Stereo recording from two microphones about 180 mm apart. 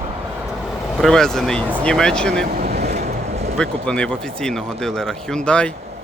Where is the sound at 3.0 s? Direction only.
35° right (ahead or behind).